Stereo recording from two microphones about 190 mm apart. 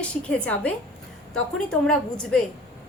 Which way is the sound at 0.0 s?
5° left (ahead or behind).